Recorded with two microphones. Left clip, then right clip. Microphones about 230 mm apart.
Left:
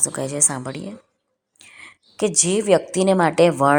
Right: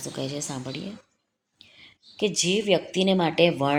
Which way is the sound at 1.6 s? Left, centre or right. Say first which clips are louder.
Left 8 dB; centre.